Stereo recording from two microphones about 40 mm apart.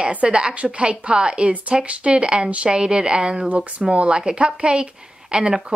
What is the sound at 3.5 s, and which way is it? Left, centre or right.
A woman's voice, right.